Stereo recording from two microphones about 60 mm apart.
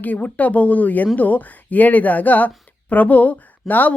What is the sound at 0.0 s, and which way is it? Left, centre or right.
Speech, left.